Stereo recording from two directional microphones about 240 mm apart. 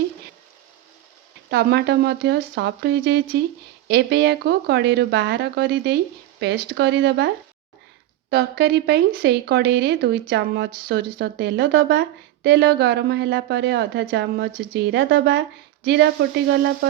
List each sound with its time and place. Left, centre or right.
1.5 s speech: right
8.3 s speech: right